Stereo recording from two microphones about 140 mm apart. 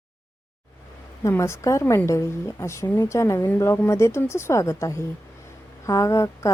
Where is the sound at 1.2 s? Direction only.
20° left (ahead or behind).